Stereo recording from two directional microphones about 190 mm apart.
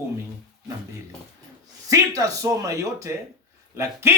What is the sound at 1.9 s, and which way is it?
A man's voice, 15° right (ahead or behind).